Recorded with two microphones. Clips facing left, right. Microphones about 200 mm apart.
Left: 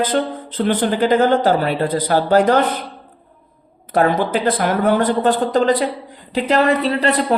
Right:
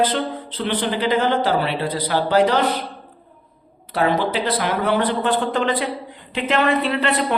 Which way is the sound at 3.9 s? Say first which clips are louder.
Left 3 dB; 50° left (ahead or behind).